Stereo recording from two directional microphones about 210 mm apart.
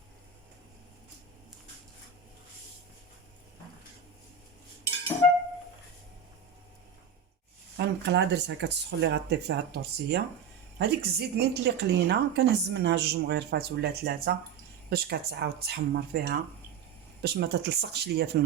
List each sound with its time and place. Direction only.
7.8 s a woman's voice: 55° right (ahead or behind)